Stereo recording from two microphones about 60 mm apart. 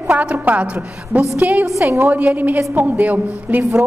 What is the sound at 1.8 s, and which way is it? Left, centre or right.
Speech, right.